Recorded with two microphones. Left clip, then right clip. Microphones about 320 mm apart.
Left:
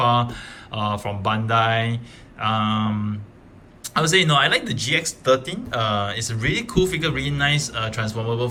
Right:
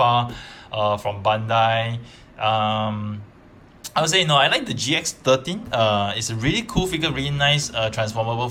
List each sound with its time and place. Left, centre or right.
0.0 s speech: centre
2.4 s a sound: centre
3.8 s speech: centre